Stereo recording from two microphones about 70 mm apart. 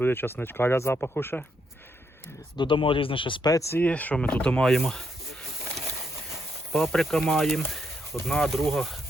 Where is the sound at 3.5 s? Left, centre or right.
Left.